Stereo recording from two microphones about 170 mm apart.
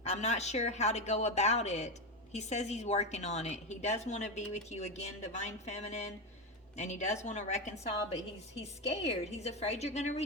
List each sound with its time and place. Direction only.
0.0 s a woman's voice: 40° left (ahead or behind)